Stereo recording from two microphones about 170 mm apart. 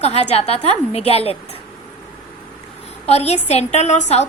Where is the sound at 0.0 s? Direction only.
40° left (ahead or behind).